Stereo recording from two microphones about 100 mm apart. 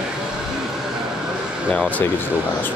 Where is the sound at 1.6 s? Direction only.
15° left (ahead or behind).